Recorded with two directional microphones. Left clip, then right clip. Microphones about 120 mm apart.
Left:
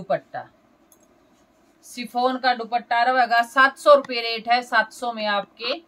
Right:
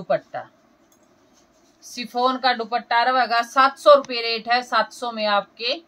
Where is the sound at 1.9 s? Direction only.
Centre (ahead or behind).